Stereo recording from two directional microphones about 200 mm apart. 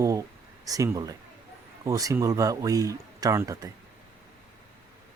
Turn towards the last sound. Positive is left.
turn(degrees=-15)  # may be behind; listen again after turning